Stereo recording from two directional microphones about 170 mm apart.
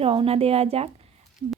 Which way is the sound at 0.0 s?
35° right (ahead or behind).